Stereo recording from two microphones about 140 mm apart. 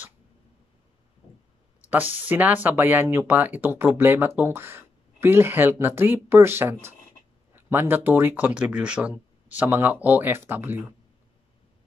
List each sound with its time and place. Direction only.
1.8 s speech: 10° right (ahead or behind)